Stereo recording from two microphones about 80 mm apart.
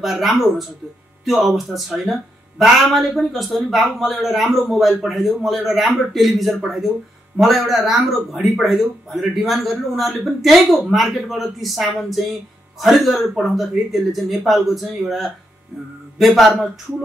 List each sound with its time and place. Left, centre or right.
0.0 s a man's voice: centre